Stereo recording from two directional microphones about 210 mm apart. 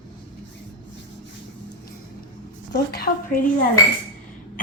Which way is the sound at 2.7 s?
45° left (ahead or behind).